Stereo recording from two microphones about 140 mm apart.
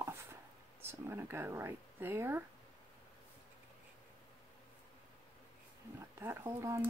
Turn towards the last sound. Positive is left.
turn(degrees=-20)  # may be behind; listen again after turning